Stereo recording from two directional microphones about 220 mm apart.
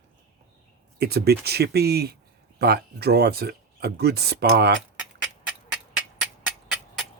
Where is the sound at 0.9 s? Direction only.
45° right (ahead or behind).